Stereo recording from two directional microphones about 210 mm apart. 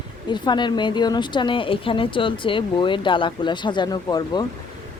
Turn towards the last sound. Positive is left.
turn(degrees=20)  # may be behind; listen again after turning